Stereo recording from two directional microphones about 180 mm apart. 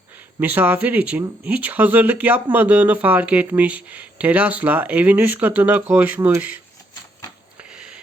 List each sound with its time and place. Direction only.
0.3 s speech: 10° right (ahead or behind)
6.9 s typewriter: 20° left (ahead or behind)